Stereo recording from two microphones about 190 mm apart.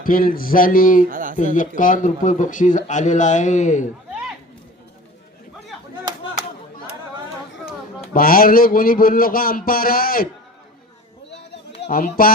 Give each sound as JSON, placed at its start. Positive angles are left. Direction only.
{"t": 0.0, "sound": "speech", "side_deg": 50}
{"t": 1.1, "sound": "speech", "side_deg": -45}
{"t": 1.5, "sound": "a man's voice", "side_deg": 45}
{"t": 8.1, "sound": "speech", "side_deg": 50}
{"t": 11.3, "sound": "a sound", "side_deg": 55}